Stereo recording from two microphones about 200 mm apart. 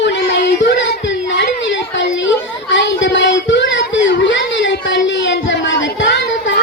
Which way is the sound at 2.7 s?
65° left (ahead or behind).